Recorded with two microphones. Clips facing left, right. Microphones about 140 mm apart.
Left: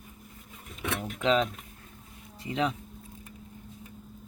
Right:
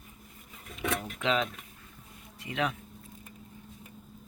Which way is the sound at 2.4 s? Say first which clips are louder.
Left 3 dB; 30° left (ahead or behind).